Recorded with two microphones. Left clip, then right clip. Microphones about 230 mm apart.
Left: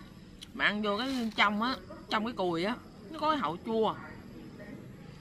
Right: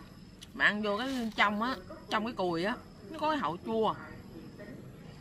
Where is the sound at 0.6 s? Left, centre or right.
Centre.